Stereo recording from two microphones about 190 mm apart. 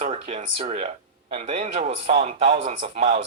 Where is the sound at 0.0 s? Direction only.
35° right (ahead or behind).